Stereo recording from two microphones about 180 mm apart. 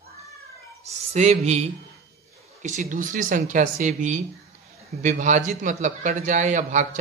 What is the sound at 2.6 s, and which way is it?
A man's voice, 45° right (ahead or behind).